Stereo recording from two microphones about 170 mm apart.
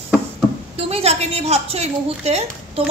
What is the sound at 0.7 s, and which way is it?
A woman's voice, 35° right (ahead or behind).